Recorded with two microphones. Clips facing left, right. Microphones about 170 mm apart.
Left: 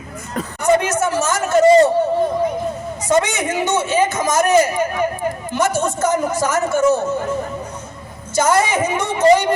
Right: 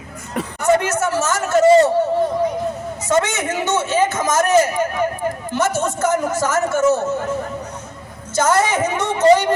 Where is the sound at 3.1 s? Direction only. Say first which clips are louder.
Left 1 dB; 15° left (ahead or behind).